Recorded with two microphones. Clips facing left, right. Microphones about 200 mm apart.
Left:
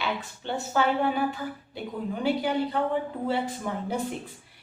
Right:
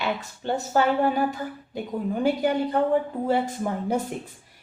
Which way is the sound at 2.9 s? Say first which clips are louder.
Right 5 dB; 45° right (ahead or behind).